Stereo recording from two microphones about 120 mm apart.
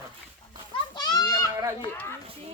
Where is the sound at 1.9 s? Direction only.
20° left (ahead or behind).